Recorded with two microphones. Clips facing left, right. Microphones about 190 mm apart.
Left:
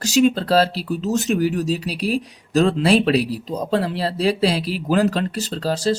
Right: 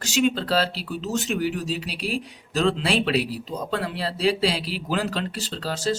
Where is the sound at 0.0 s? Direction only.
40° left (ahead or behind).